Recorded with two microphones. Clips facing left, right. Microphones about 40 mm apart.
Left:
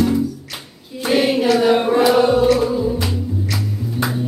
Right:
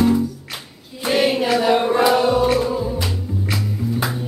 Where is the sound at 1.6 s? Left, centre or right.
Centre.